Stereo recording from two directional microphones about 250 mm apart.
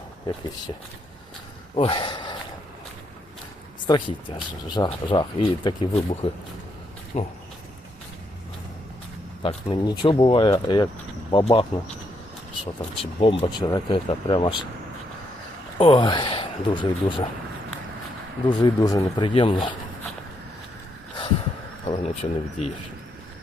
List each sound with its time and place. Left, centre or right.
1.7 s speech: left
3.8 s speech: centre
9.4 s speech: centre
13.0 s speech: left
15.8 s speech: left
18.4 s speech: centre
21.8 s speech: left